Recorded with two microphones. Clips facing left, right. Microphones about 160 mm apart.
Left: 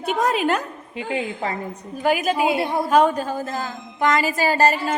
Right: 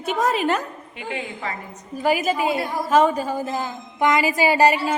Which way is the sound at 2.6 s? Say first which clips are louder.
Left 4 dB; 25° left (ahead or behind).